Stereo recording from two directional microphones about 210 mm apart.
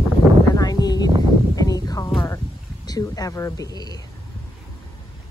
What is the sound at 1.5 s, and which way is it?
Music, 15° left (ahead or behind).